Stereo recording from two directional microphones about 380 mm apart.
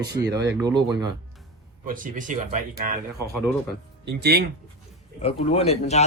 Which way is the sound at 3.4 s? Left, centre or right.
Centre.